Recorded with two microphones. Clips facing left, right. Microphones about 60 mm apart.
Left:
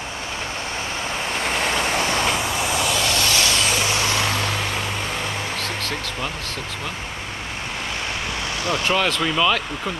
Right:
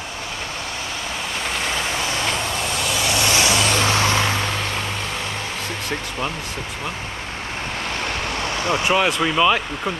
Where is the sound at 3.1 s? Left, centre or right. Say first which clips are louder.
Right 2 dB; centre.